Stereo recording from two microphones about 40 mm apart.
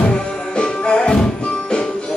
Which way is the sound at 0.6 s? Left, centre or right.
Left.